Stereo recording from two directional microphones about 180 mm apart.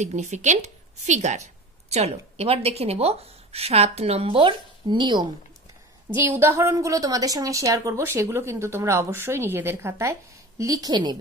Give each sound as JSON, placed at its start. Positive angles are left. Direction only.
{"t": 0.0, "sound": "a woman's voice", "side_deg": -40}
{"t": 6.0, "sound": "a woman's voice", "side_deg": -10}